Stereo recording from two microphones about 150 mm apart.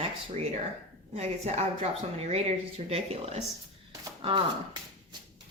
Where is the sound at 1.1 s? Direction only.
45° right (ahead or behind).